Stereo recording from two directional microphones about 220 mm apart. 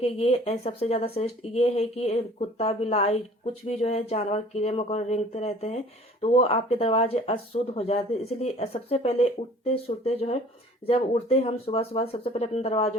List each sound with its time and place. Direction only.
0.0 s speech: 30° left (ahead or behind)